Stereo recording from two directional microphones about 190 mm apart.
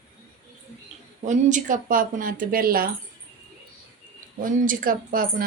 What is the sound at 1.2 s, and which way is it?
Speech, 40° right (ahead or behind).